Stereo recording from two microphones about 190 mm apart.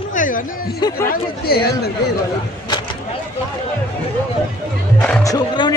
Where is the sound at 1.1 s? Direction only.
55° left (ahead or behind).